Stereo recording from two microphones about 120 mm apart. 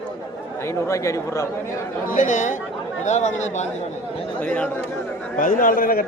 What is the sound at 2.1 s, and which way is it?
Speech, 90° left.